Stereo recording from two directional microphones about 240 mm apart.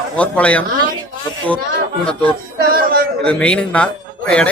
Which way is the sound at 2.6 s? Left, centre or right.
Right.